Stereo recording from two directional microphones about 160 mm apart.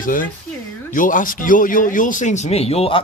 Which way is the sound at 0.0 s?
55° left (ahead or behind).